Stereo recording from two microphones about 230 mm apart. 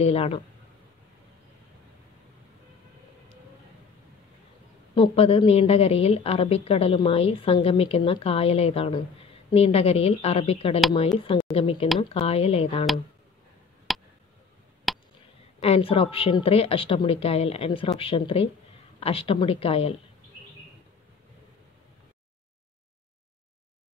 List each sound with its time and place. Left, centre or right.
0.0 s a woman's voice: left
4.9 s a woman's voice: left
13.9 s a sound: centre
15.6 s a woman's voice: left